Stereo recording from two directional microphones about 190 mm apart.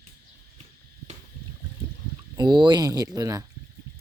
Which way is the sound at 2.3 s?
25° right (ahead or behind).